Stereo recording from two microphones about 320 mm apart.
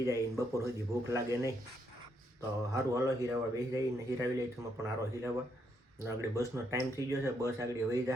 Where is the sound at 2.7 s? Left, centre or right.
Centre.